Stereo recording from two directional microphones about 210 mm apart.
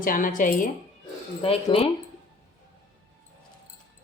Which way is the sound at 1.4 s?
25° left (ahead or behind).